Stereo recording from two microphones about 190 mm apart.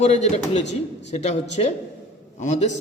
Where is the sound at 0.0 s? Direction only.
40° left (ahead or behind).